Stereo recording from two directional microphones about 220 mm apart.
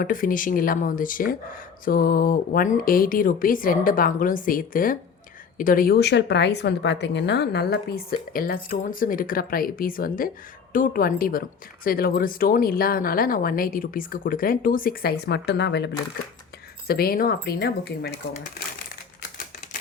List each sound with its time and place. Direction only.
0.0 s a woman's voice: 40° left (ahead or behind)